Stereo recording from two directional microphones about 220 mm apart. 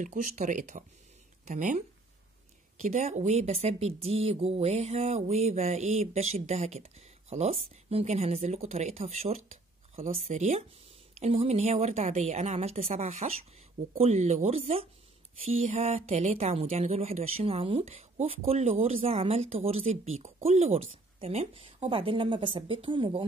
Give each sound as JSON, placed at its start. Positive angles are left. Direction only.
{"t": 0.0, "sound": "speech", "side_deg": -35}